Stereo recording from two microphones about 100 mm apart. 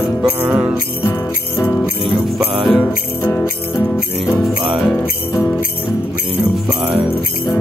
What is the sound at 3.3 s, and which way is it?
Music, 20° left (ahead or behind).